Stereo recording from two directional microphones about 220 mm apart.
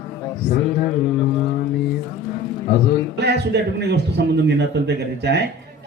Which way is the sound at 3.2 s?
50° right (ahead or behind).